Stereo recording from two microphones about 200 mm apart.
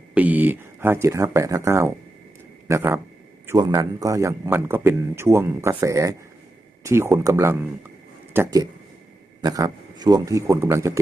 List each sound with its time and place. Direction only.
0.1 s a man's voice: 10° right (ahead or behind)